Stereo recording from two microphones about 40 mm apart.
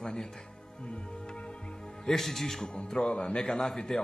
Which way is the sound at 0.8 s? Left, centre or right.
Left.